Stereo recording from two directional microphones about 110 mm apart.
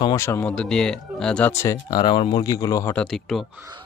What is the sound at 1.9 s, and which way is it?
Speech, 40° left (ahead or behind).